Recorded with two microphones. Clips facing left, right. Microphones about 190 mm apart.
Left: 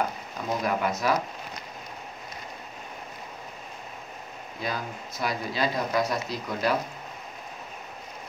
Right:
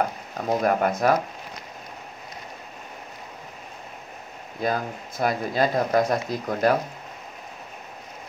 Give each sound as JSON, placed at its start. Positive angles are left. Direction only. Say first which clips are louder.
{"t": 0.5, "sound": "speech", "louder": "right 5 dB", "side_deg": -50}
{"t": 4.6, "sound": "speech", "louder": "right 7 dB", "side_deg": -50}